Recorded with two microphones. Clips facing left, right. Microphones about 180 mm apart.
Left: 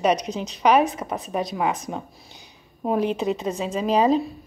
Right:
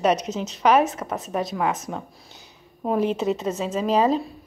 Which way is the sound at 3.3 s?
15° left (ahead or behind).